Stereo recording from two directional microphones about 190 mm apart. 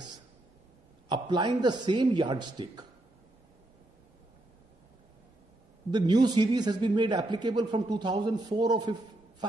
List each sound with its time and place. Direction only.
1.0 s a man's voice: 25° right (ahead or behind)
5.9 s a man's voice: 20° right (ahead or behind)